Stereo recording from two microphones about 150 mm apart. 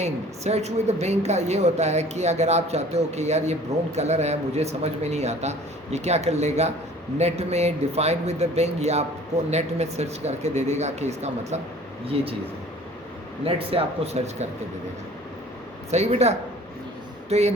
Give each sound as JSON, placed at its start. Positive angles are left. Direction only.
{"t": 0.0, "sound": "a woman's voice", "side_deg": -45}
{"t": 13.4, "sound": "speech", "side_deg": -40}
{"t": 15.9, "sound": "a woman's voice", "side_deg": -45}